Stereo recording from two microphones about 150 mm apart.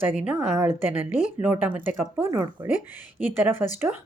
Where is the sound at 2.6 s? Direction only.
50° left (ahead or behind).